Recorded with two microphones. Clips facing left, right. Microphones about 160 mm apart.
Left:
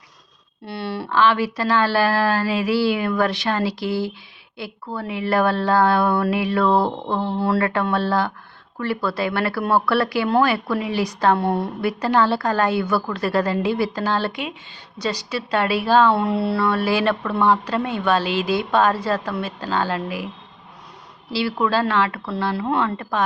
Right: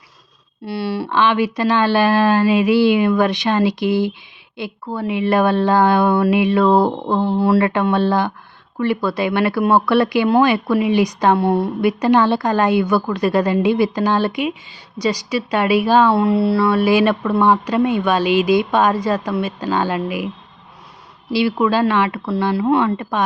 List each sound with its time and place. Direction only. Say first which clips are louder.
0.6 s a woman's voice: right 5 dB; 10° right (ahead or behind)
16.1 s a woman's voice: right 5 dB; 5° right (ahead or behind)
21.3 s a woman's voice: right 4 dB; 15° right (ahead or behind)